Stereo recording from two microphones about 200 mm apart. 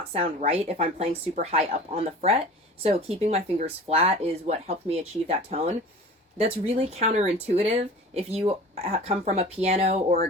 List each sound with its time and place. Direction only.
0.1 s speech: 30° right (ahead or behind)